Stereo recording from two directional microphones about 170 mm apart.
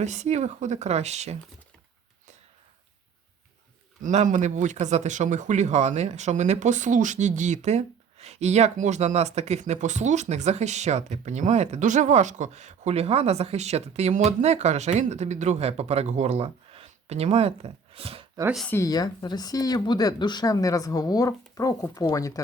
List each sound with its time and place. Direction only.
0.0 s speech: 40° right (ahead or behind)
4.0 s speech: 45° right (ahead or behind)
18.7 s speech: 20° left (ahead or behind)